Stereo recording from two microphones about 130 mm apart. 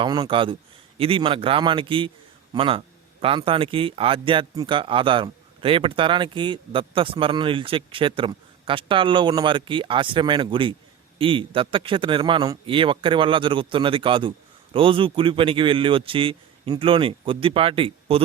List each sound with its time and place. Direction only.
0.0 s speech: 35° right (ahead or behind)